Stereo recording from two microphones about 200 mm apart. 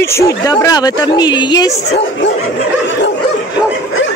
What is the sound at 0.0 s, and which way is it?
A woman's voice, 15° left (ahead or behind).